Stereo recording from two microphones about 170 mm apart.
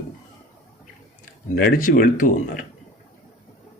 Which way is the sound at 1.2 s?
60° left (ahead or behind).